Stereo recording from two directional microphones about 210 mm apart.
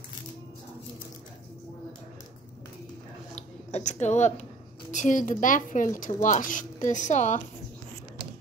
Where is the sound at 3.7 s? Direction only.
35° left (ahead or behind).